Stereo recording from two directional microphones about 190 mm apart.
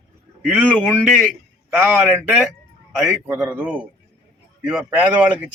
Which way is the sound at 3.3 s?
15° right (ahead or behind).